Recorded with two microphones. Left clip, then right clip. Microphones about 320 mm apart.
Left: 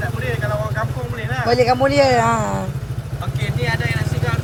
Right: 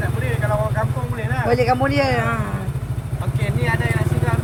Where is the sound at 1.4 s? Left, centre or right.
Centre.